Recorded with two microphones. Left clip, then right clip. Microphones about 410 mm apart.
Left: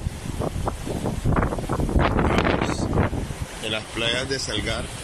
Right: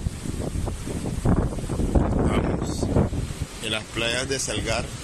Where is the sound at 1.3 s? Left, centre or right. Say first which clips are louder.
Even; right.